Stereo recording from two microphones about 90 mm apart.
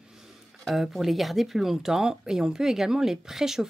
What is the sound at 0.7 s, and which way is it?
Speech, centre (ahead or behind).